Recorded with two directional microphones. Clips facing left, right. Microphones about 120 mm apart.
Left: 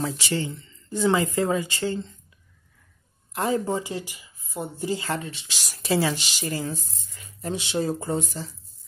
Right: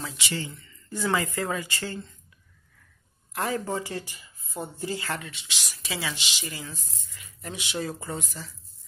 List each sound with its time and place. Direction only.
0.0 s speech: 35° left (ahead or behind)
3.3 s speech: 25° left (ahead or behind)